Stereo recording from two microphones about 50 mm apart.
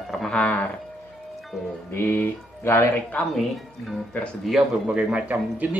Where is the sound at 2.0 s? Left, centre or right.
Left.